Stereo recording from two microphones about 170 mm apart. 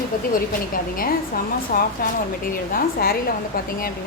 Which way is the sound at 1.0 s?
55° left (ahead or behind).